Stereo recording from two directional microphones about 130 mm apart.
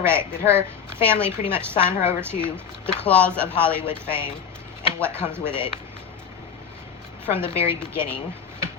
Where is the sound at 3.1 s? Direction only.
10° left (ahead or behind).